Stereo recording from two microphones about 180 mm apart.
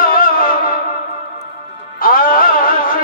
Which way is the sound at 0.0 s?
50° left (ahead or behind).